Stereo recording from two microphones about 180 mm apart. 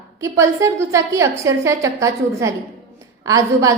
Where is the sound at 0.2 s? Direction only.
15° right (ahead or behind).